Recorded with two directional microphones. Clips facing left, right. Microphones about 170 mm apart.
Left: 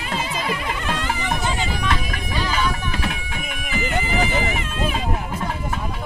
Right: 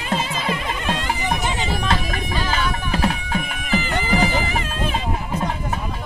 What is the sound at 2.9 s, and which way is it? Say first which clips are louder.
Bagpipes: right 6 dB; 35° right (ahead or behind).